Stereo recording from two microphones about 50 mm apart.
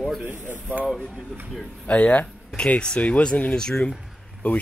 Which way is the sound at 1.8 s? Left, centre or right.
Left.